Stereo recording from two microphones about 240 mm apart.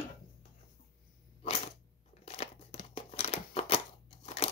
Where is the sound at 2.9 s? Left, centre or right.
Left.